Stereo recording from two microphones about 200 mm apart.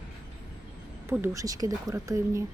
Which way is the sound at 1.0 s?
10° right (ahead or behind).